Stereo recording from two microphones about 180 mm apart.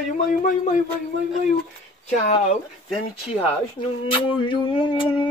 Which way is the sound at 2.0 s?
40° left (ahead or behind).